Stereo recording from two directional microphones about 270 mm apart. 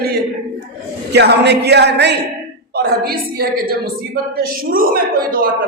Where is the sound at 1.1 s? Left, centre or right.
Right.